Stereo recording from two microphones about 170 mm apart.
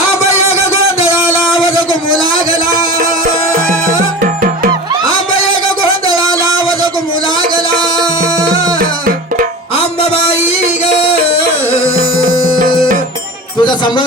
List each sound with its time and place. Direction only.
1.6 s a sound: 25° right (ahead or behind)
3.0 s music: 45° right (ahead or behind)
6.1 s music: 20° right (ahead or behind)
8.8 s music: 55° right (ahead or behind)
9.7 s music: 35° left (ahead or behind)
13.6 s music: 25° left (ahead or behind)